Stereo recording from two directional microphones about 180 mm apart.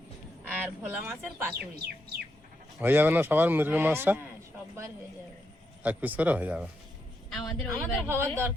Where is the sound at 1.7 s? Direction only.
60° right (ahead or behind).